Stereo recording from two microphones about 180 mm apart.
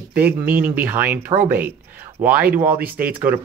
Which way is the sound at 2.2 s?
50° right (ahead or behind).